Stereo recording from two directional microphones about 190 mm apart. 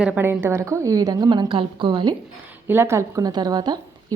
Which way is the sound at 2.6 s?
15° right (ahead or behind).